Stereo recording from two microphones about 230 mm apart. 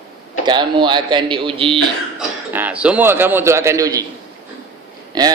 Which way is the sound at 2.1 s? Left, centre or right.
Centre.